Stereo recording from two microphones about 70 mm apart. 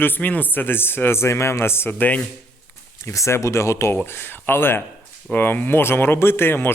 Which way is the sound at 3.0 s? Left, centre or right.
Left.